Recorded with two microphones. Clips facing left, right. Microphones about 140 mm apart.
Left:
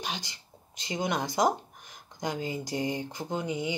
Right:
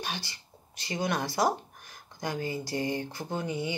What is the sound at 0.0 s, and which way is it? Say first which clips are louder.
Speech: even; 20° left (ahead or behind).